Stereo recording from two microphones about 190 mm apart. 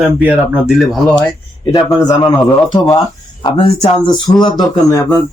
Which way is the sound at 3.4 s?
30° left (ahead or behind).